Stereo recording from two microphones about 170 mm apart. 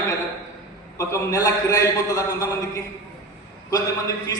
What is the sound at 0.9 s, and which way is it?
A man's voice, 20° left (ahead or behind).